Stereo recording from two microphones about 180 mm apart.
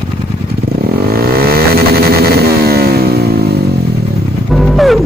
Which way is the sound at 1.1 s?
55° right (ahead or behind).